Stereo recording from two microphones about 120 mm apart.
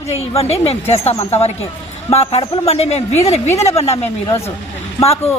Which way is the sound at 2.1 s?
60° left (ahead or behind).